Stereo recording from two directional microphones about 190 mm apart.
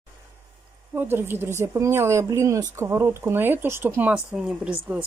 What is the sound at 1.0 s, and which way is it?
Speech, 10° right (ahead or behind).